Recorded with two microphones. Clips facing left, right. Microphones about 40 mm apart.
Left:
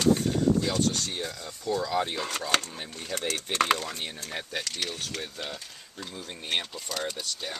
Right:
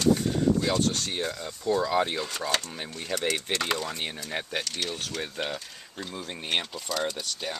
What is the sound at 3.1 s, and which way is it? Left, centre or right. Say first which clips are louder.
Speech: right 3 dB; right.